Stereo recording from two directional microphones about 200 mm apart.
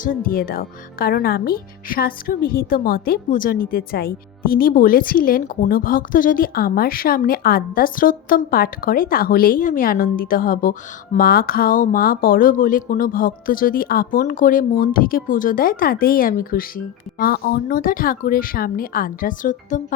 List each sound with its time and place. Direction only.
0.0 s speech: 45° left (ahead or behind)